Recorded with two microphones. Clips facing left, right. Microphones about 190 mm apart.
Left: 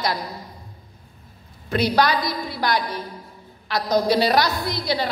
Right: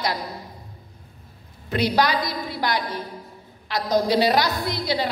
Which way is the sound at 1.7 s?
15° right (ahead or behind).